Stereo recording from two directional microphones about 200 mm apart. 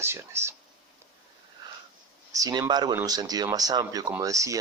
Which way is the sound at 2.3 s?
15° right (ahead or behind).